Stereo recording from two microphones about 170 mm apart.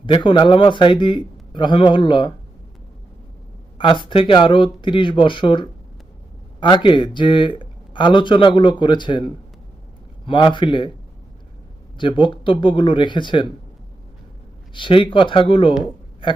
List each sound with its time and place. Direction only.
0.0 s a man's voice: 30° left (ahead or behind)
3.8 s a man's voice: 30° left (ahead or behind)
11.9 s a man's voice: 30° left (ahead or behind)
14.7 s a man's voice: 30° left (ahead or behind)